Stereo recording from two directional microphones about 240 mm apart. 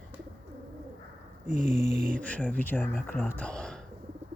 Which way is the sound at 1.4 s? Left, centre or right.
Right.